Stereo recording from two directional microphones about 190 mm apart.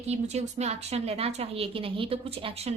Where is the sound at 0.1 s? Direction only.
35° right (ahead or behind).